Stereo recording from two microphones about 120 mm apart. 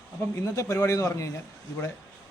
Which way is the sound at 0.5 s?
25° left (ahead or behind).